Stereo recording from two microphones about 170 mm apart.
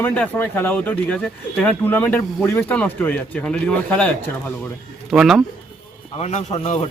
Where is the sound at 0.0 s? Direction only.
10° left (ahead or behind).